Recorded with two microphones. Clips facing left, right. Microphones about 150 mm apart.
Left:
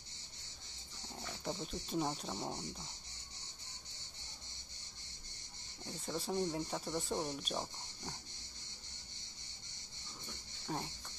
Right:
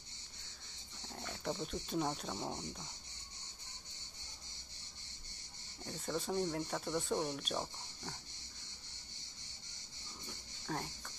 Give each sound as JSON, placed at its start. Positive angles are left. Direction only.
{"t": 1.1, "sound": "a sound", "side_deg": 0}
{"t": 1.6, "sound": "speech", "side_deg": 0}
{"t": 5.9, "sound": "speech", "side_deg": 5}
{"t": 10.7, "sound": "speech", "side_deg": 15}